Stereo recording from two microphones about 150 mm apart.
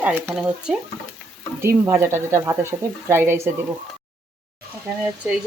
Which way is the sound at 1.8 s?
15° right (ahead or behind).